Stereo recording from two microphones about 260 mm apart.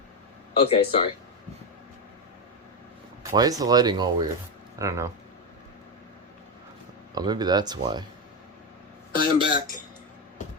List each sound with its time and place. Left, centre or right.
0.5 s speech: left
3.3 s speech: centre
7.1 s speech: centre
9.1 s speech: centre